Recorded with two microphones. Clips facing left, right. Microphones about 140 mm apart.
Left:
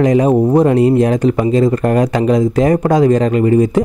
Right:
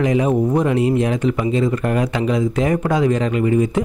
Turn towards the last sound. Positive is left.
turn(degrees=40)  # may be behind; listen again after turning